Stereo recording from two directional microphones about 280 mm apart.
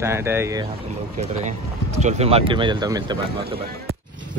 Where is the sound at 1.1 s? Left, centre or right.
Right.